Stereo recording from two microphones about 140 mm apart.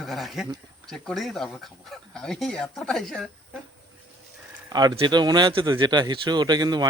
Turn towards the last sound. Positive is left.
turn(degrees=-30)  # may be behind; listen again after turning